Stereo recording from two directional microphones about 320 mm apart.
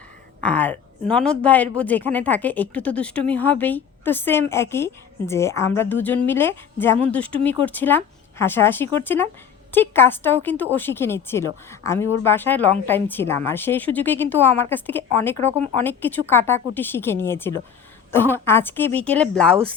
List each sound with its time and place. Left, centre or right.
0.4 s speech: centre
15.4 s speech: right
15.8 s speech: centre